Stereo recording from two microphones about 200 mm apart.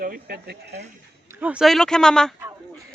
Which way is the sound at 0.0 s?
50° right (ahead or behind).